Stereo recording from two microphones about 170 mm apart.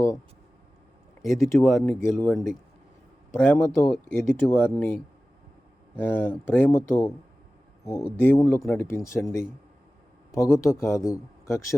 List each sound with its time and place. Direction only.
1.2 s speech: centre (ahead or behind)
1.9 s speech: 15° left (ahead or behind)
2.2 s speech: centre (ahead or behind)
3.4 s speech: 10° left (ahead or behind)
6.0 s speech: 10° left (ahead or behind)